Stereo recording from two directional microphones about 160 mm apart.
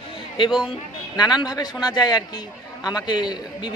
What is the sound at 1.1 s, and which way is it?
A man's voice, 25° left (ahead or behind).